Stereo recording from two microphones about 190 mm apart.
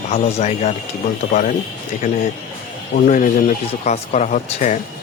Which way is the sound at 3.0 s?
45° left (ahead or behind).